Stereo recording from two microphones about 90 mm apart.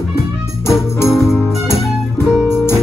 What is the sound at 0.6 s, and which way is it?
Jingle bell, 30° left (ahead or behind).